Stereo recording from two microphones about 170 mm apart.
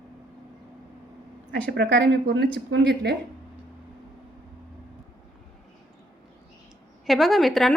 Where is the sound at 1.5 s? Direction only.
85° right.